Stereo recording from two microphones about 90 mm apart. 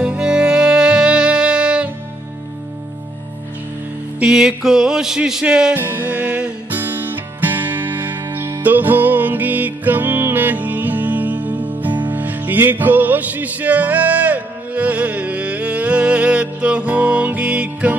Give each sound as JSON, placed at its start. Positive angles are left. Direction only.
{"t": 0.0, "sound": "music", "side_deg": -10}
{"t": 4.2, "sound": "music", "side_deg": -10}
{"t": 5.8, "sound": "music", "side_deg": -20}